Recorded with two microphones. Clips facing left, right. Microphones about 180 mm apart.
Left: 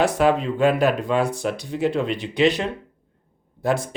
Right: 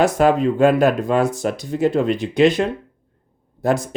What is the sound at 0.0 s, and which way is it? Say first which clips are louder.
Speech: right 4 dB; 45° right (ahead or behind).